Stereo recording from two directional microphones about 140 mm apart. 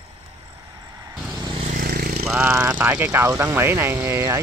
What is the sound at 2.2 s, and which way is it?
Speech, 5° right (ahead or behind).